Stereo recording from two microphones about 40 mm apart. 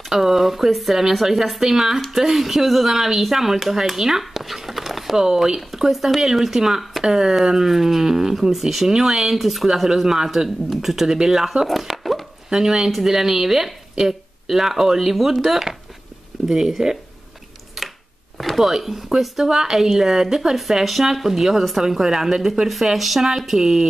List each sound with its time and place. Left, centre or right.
0.1 s speech: centre
5.1 s speech: centre
5.7 s speech: centre
6.8 s a sound: centre
7.1 s speech: centre
12.4 s speech: centre
17.8 s a sound: centre
18.4 s speech: centre